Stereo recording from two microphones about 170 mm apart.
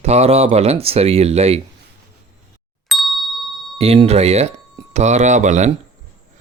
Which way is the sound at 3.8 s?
35° right (ahead or behind).